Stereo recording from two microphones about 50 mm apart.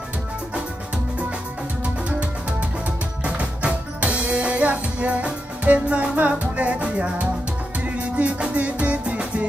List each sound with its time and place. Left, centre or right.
2.0 s music: right